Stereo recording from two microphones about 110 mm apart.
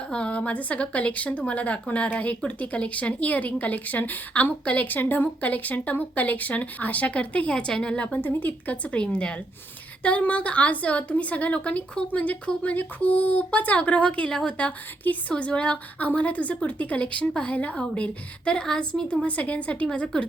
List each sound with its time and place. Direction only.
0.1 s a woman's voice: 10° left (ahead or behind)